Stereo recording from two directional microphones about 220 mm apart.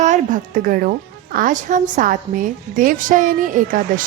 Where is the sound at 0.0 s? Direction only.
35° right (ahead or behind).